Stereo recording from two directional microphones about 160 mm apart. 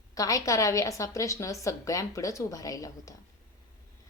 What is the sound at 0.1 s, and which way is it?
A woman's voice, 20° left (ahead or behind).